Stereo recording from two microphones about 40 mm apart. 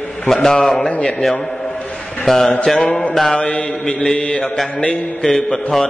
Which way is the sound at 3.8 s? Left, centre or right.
Left.